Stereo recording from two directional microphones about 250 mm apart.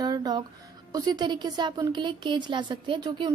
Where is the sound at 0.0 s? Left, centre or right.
Centre.